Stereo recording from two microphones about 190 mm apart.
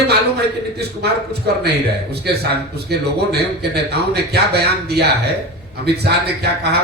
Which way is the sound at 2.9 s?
60° right (ahead or behind).